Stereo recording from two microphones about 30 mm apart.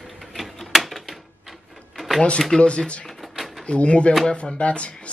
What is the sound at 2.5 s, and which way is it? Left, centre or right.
Speech, left.